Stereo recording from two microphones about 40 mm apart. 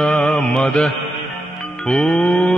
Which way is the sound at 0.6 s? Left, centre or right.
Left.